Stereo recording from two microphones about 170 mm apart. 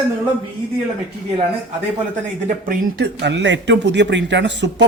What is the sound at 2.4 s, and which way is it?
Speech, 50° right (ahead or behind).